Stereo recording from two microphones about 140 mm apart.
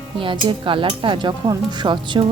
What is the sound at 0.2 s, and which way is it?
Speech, 35° right (ahead or behind).